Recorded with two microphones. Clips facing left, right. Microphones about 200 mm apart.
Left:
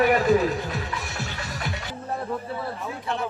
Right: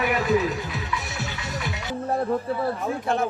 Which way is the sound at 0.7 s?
Centre (ahead or behind).